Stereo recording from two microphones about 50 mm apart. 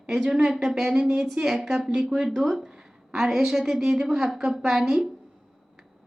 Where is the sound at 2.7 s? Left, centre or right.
Centre.